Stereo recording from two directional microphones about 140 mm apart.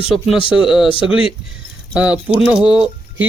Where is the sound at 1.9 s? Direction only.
10° right (ahead or behind).